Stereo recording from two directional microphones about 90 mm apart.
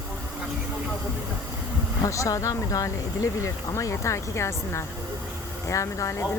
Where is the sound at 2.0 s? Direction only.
35° left (ahead or behind).